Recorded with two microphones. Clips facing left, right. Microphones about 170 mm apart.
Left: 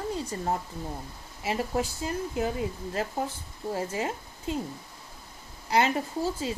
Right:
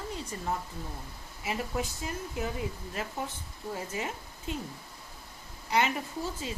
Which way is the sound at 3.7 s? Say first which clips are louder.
Left 5 dB; 30° left (ahead or behind).